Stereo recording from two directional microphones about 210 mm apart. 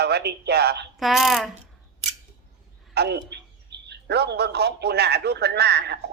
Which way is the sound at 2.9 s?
50° right (ahead or behind).